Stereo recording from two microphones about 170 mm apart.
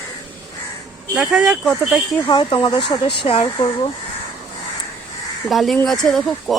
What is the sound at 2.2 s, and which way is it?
Speech, 30° left (ahead or behind).